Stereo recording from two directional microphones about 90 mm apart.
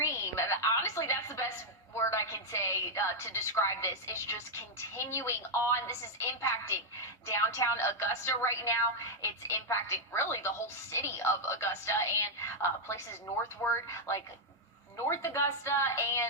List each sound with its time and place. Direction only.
0.0 s music: 30° left (ahead or behind)
2.0 s a woman's voice: 30° left (ahead or behind)